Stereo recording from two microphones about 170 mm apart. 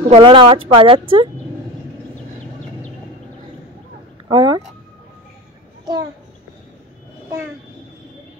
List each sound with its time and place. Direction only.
0.1 s speech: 30° right (ahead or behind)
4.3 s speech: 30° right (ahead or behind)